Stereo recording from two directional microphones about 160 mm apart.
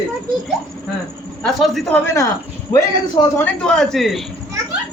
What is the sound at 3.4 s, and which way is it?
Speech, 5° left (ahead or behind).